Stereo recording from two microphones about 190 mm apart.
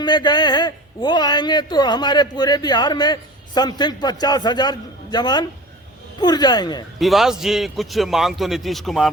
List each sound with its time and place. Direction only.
0.0 s a man's voice: 20° left (ahead or behind)
7.0 s a man's voice: centre (ahead or behind)